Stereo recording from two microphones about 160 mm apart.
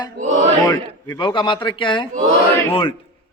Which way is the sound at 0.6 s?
25° left (ahead or behind).